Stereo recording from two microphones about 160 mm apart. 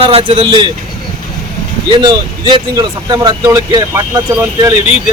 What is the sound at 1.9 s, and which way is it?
Speech, 30° right (ahead or behind).